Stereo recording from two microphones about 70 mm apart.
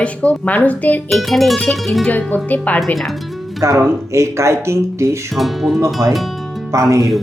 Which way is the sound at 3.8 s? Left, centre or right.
Right.